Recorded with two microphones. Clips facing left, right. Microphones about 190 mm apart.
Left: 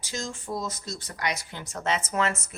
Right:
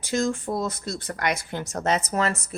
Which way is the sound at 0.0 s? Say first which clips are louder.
Right 10 dB; 55° right (ahead or behind).